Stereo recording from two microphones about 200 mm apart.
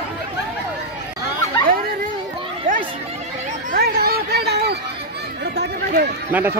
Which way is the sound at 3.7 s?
50° right (ahead or behind).